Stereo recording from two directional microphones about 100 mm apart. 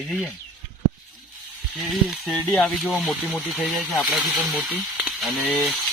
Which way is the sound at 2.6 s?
15° left (ahead or behind).